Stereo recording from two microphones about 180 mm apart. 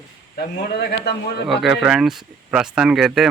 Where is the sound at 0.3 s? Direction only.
60° left (ahead or behind).